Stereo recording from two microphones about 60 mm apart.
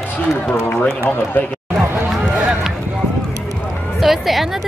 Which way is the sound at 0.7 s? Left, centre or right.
Left.